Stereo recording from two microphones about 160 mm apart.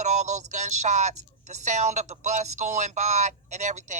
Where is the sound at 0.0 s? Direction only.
50° right (ahead or behind).